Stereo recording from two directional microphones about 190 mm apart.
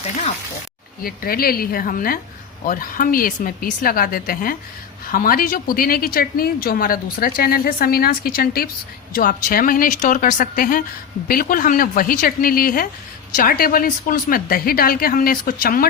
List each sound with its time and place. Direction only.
1.0 s speech: 50° left (ahead or behind)